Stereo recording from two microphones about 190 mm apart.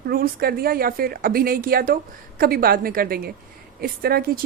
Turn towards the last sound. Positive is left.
turn(degrees=-55)  # may be behind; listen again after turning